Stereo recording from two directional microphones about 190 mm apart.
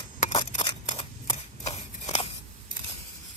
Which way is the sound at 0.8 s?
30° left (ahead or behind).